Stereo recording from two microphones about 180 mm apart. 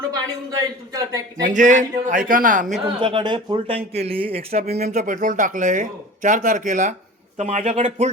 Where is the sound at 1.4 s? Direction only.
45° right (ahead or behind).